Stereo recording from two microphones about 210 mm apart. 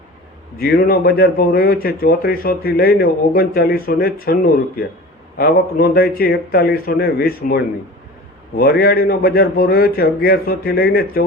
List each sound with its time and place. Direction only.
0.6 s speech: 45° left (ahead or behind)